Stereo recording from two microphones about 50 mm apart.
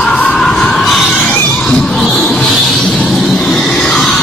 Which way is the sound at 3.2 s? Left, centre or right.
Centre.